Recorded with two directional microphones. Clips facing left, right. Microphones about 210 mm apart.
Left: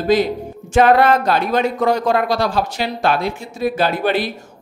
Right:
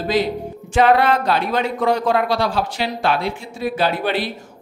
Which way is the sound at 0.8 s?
45° left (ahead or behind).